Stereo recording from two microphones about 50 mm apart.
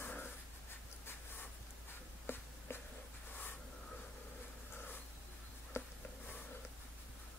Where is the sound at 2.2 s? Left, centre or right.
Left.